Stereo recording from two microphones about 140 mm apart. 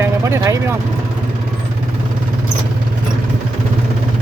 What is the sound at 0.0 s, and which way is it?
Vehicle, 20° right (ahead or behind).